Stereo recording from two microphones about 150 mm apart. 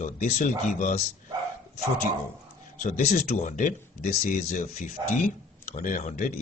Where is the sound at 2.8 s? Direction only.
65° left (ahead or behind).